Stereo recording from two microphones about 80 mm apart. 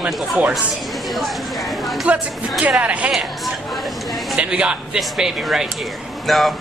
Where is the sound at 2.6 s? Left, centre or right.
Centre.